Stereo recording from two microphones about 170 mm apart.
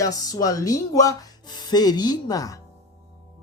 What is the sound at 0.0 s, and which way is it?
Speech, 20° left (ahead or behind).